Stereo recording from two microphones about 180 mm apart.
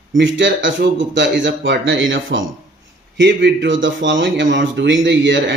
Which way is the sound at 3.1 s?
75° right (ahead or behind).